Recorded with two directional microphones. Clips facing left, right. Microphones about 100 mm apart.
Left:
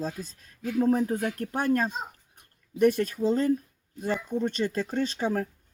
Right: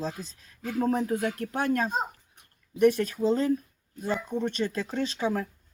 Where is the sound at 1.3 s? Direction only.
45° left (ahead or behind).